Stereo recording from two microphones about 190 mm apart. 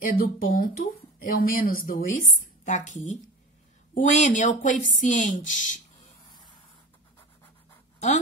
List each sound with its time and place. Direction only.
0.0 s speech: 45° left (ahead or behind)